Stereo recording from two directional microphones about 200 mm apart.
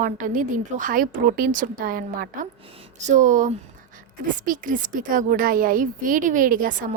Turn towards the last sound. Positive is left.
turn(degrees=-40)  # may be behind; listen again after turning